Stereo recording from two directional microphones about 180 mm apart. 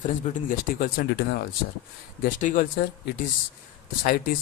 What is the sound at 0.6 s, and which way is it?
Speech, 55° left (ahead or behind).